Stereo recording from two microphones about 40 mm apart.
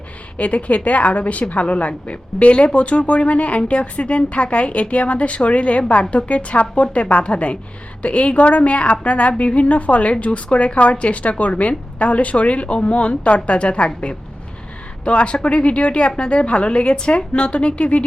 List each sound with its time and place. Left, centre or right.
0.3 s a woman's voice: left